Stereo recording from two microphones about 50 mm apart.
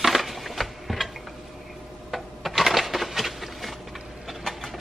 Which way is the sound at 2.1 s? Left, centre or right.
Centre.